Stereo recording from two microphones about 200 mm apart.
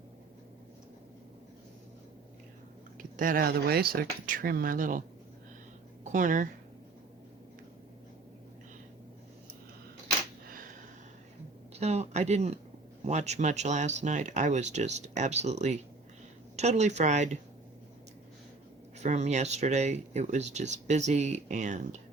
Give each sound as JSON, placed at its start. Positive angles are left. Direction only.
{"t": 3.0, "sound": "speech", "side_deg": -45}
{"t": 6.1, "sound": "speech", "side_deg": -40}
{"t": 10.5, "sound": "a sound", "side_deg": -45}
{"t": 11.7, "sound": "speech", "side_deg": -35}
{"t": 18.9, "sound": "speech", "side_deg": -35}